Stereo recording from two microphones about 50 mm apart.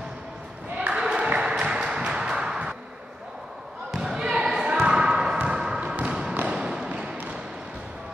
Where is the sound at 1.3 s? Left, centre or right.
Centre.